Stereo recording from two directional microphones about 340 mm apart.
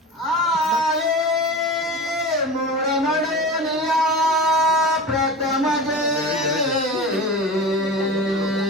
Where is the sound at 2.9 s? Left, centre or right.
Centre.